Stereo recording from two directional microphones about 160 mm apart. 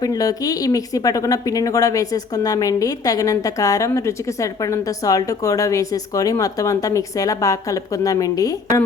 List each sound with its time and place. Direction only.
0.0 s speech: 20° left (ahead or behind)